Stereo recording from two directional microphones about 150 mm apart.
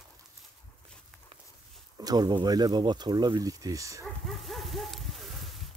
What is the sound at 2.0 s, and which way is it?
Speech, 25° right (ahead or behind).